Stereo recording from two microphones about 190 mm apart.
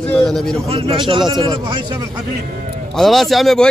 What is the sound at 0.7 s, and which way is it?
A man's voice, 30° right (ahead or behind).